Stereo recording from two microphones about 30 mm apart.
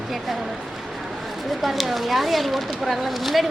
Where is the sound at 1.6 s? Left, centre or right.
Centre.